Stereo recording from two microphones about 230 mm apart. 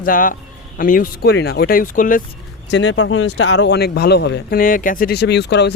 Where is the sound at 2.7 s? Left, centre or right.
Left.